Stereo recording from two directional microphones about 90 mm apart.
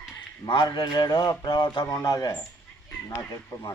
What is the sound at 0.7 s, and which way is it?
Speech, 50° left (ahead or behind).